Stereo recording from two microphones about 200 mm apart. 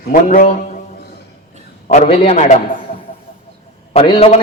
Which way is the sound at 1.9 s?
30° left (ahead or behind).